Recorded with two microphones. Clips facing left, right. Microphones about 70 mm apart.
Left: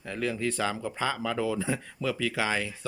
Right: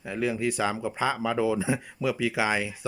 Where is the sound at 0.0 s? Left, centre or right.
Centre.